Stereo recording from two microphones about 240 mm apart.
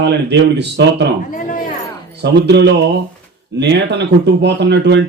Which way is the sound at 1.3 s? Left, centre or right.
Left.